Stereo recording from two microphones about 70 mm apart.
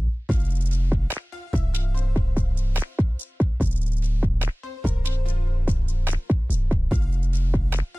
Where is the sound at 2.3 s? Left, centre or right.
Right.